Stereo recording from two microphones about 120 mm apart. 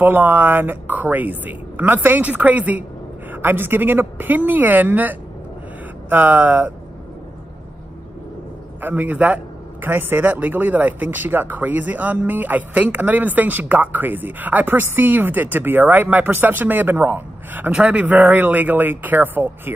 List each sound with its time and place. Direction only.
0.0 s a man's voice: 15° right (ahead or behind)
8.8 s a man's voice: 15° right (ahead or behind)